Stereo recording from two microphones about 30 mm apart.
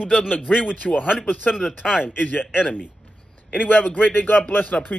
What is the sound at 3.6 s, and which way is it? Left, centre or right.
Speech, left.